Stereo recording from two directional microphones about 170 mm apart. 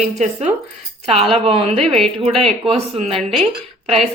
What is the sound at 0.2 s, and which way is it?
A woman's voice, 45° right (ahead or behind).